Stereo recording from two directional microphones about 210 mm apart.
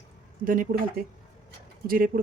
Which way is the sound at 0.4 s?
40° right (ahead or behind).